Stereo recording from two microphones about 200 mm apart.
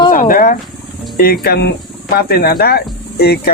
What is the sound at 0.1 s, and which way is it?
Wild animals, 40° left (ahead or behind).